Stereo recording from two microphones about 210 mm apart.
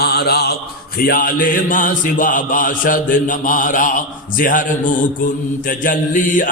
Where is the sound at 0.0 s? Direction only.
50° left (ahead or behind).